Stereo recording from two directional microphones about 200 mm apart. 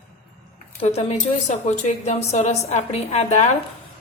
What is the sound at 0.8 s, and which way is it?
A woman's voice, 35° left (ahead or behind).